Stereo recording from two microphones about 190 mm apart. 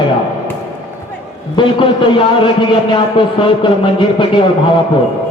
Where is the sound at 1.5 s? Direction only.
25° left (ahead or behind).